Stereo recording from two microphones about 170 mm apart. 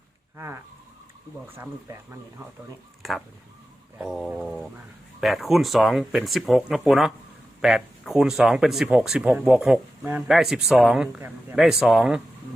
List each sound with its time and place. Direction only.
0.3 s speech: 15° right (ahead or behind)
3.0 s speech: centre (ahead or behind)